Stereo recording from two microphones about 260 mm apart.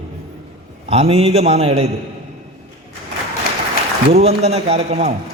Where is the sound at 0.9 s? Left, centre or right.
Right.